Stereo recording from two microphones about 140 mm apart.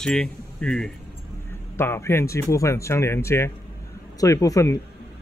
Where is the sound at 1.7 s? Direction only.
15° left (ahead or behind).